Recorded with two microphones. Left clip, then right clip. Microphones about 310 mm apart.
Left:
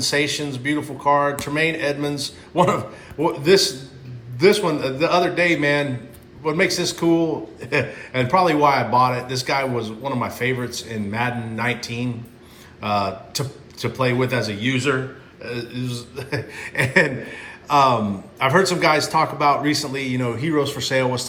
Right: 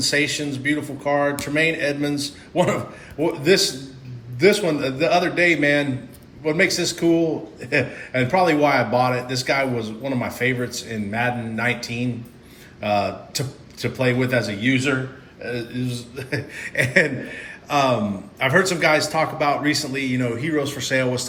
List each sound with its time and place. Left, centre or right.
0.0 s a man's voice: centre